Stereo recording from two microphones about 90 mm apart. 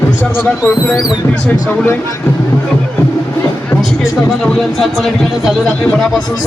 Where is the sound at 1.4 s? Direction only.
20° left (ahead or behind).